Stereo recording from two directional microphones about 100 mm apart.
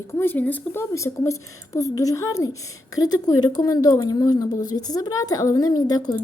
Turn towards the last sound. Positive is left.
turn(degrees=40)  # may be behind; listen again after turning